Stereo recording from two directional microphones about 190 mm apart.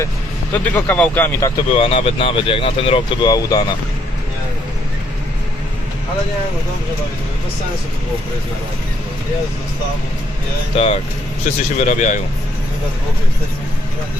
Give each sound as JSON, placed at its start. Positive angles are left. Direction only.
{"t": 0.5, "sound": "speech", "side_deg": 10}
{"t": 1.7, "sound": "speech", "side_deg": 30}
{"t": 10.8, "sound": "speech", "side_deg": 30}